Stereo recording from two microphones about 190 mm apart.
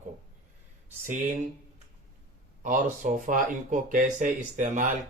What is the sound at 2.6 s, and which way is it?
Speech, 45° right (ahead or behind).